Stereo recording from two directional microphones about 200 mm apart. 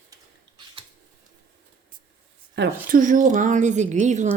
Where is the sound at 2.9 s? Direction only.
40° right (ahead or behind).